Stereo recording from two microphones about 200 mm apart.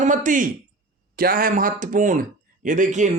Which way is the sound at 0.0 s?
40° right (ahead or behind).